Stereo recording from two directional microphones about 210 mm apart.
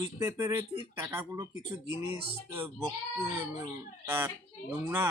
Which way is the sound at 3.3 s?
10° right (ahead or behind).